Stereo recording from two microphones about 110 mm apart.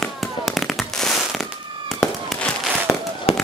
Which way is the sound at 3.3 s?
60° left (ahead or behind).